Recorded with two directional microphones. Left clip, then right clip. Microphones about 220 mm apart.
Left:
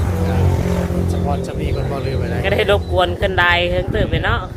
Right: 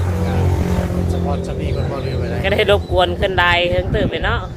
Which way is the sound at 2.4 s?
20° right (ahead or behind).